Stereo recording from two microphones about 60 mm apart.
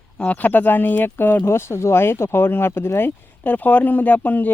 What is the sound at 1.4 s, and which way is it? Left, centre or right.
Speech, left.